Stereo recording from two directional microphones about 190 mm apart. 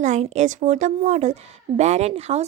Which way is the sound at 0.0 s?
40° right (ahead or behind).